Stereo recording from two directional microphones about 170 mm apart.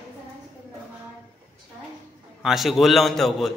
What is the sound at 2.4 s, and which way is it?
A man's voice, centre (ahead or behind).